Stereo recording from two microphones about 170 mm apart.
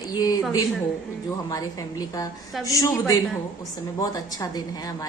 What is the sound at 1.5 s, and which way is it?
A woman's voice, 20° left (ahead or behind).